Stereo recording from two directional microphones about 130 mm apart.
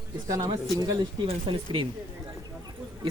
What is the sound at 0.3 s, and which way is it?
Speech, 25° right (ahead or behind).